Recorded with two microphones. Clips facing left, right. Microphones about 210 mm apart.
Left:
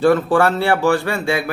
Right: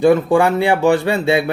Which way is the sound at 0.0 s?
15° right (ahead or behind).